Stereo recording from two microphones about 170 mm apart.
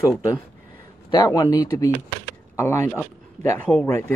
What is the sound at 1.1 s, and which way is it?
Speech, 20° left (ahead or behind).